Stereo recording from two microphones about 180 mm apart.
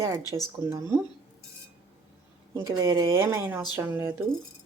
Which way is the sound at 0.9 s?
10° right (ahead or behind).